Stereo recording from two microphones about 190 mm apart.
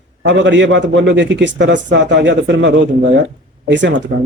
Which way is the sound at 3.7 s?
70° right (ahead or behind).